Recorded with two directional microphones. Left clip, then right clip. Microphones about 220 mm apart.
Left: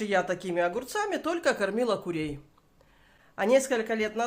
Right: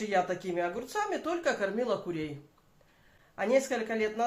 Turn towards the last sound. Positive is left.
turn(degrees=45)  # may be behind; listen again after turning